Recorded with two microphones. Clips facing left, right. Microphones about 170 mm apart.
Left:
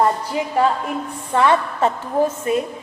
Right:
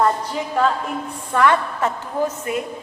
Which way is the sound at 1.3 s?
20° left (ahead or behind).